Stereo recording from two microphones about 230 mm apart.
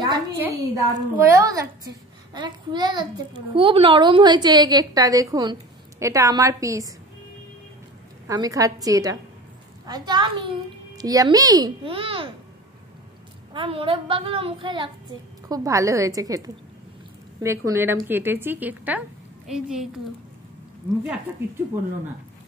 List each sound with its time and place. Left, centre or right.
0.4 s a child's voice: centre
8.3 s a child's voice: centre
13.5 s a child's voice: right; by 19.9 s centre